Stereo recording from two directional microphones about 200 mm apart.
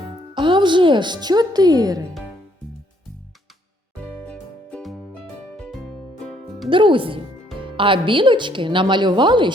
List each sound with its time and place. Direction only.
0.3 s a woman's voice: 25° right (ahead or behind)
4.3 s music: 5° left (ahead or behind)
6.7 s a woman's voice: 25° right (ahead or behind)